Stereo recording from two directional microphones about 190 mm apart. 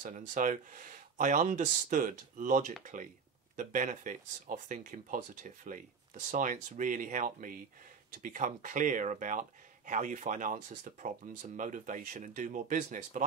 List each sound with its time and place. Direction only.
0.0 s speech: 40° right (ahead or behind)